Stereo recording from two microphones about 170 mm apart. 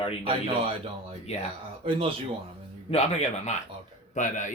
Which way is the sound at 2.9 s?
40° left (ahead or behind).